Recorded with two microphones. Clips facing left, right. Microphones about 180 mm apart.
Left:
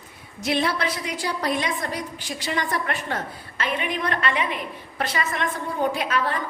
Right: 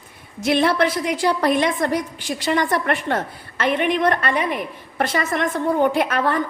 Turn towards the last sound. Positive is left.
turn(degrees=-50)  # may be behind; listen again after turning